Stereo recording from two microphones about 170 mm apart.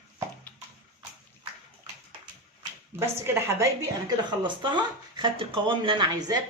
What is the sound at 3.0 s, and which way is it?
Speech, 15° right (ahead or behind).